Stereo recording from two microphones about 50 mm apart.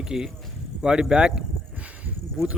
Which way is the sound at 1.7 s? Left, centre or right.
Right.